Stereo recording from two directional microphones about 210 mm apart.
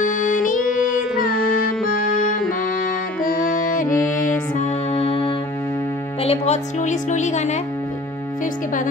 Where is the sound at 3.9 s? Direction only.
15° left (ahead or behind).